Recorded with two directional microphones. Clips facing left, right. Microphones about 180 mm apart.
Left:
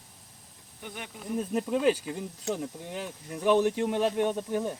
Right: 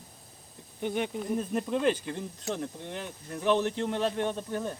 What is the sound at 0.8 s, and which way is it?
Speech, 20° right (ahead or behind).